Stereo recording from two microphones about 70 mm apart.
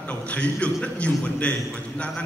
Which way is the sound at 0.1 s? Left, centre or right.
Centre.